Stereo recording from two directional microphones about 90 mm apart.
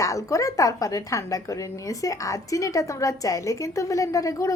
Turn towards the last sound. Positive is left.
turn(degrees=40)  # may be behind; listen again after turning